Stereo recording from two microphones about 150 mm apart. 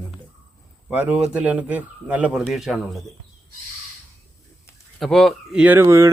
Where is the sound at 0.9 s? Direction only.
10° right (ahead or behind).